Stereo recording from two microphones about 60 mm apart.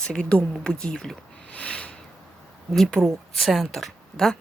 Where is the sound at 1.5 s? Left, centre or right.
Left.